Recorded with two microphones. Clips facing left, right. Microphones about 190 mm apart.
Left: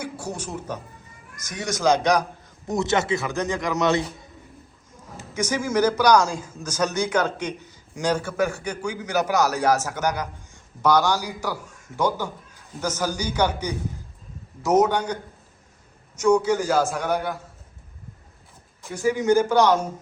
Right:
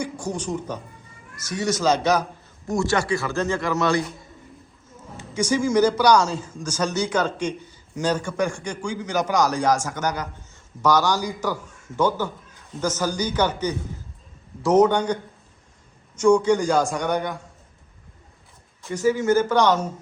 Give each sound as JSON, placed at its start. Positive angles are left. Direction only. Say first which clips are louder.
{"t": 0.0, "sound": "speech", "louder": "right 3 dB", "side_deg": 10}
{"t": 1.8, "sound": "a man's voice", "louder": "left 2 dB", "side_deg": 10}
{"t": 5.1, "sound": "a man's voice", "louder": "right 3 dB", "side_deg": 10}
{"t": 16.2, "sound": "a man's voice", "louder": "right 2 dB", "side_deg": 5}
{"t": 18.8, "sound": "a sound", "louder": "right 5 dB", "side_deg": 0}
{"t": 19.0, "sound": "a man's voice", "louder": "even", "side_deg": 15}